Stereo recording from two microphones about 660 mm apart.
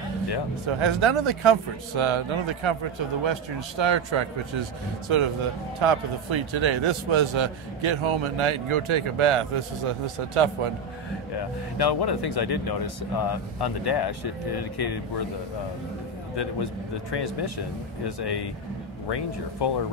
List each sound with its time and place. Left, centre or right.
0.7 s a man's voice: right
11.8 s speech: left
17.1 s speech: left